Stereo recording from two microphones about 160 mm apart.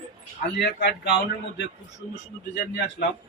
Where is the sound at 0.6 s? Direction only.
90° left.